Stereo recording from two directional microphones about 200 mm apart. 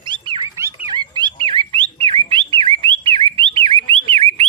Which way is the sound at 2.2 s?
25° right (ahead or behind).